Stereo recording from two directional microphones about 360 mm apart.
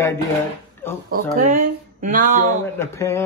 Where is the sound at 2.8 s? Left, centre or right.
Centre.